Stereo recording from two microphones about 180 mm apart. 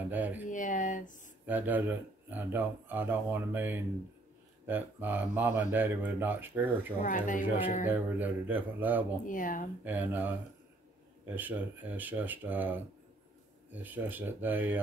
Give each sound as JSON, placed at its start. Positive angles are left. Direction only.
{"t": 0.1, "sound": "speech", "side_deg": -10}
{"t": 0.5, "sound": "speech", "side_deg": 45}
{"t": 1.4, "sound": "speech", "side_deg": -10}
{"t": 7.0, "sound": "speech", "side_deg": 45}
{"t": 7.4, "sound": "speech", "side_deg": -10}
{"t": 9.2, "sound": "speech", "side_deg": 50}
{"t": 9.8, "sound": "speech", "side_deg": -10}